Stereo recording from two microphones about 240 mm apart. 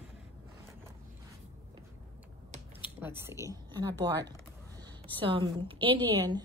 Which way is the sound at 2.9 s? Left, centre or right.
Centre.